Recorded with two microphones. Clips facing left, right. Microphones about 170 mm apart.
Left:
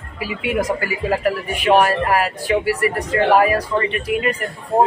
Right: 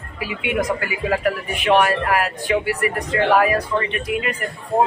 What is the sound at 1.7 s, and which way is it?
Speech, 35° left (ahead or behind).